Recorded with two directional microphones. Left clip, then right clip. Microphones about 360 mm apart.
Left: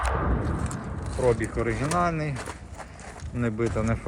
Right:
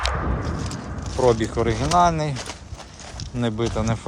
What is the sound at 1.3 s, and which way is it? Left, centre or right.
Speech, centre.